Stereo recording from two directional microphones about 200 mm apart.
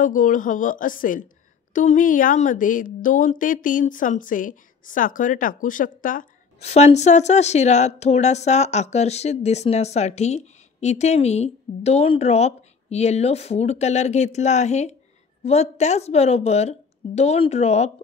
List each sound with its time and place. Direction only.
0.0 s a woman's voice: 40° left (ahead or behind)